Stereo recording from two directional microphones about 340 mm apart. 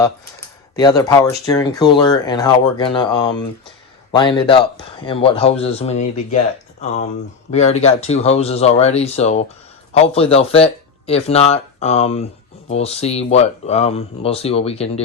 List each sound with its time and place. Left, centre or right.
0.8 s speech: centre